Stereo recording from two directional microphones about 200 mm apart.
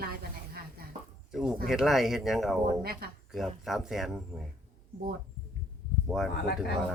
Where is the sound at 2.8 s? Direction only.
50° right (ahead or behind).